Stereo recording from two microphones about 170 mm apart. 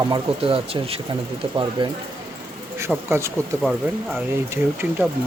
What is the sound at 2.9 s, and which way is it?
Speech, 15° right (ahead or behind).